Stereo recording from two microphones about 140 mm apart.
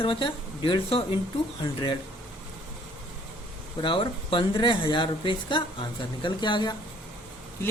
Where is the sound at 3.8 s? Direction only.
40° left (ahead or behind).